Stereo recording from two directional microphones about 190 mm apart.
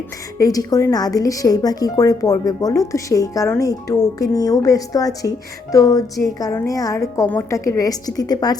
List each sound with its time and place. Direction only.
0.3 s a woman's voice: 20° left (ahead or behind)